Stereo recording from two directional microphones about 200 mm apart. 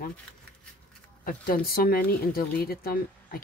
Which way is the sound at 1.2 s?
45° left (ahead or behind).